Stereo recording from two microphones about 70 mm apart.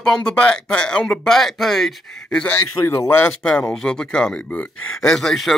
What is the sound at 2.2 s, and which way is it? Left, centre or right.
Speech, left.